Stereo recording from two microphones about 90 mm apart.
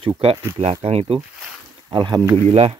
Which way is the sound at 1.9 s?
55° right (ahead or behind).